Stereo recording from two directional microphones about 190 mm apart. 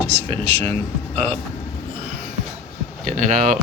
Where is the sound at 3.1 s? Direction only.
40° right (ahead or behind).